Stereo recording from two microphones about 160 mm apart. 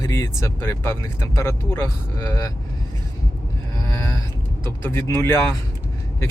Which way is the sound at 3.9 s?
15° left (ahead or behind).